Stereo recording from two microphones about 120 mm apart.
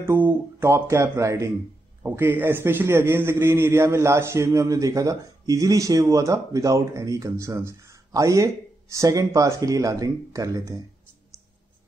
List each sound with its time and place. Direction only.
0.0 s a man's voice: 20° right (ahead or behind)